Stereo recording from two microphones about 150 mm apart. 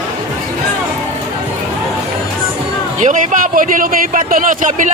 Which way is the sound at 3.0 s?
60° right (ahead or behind).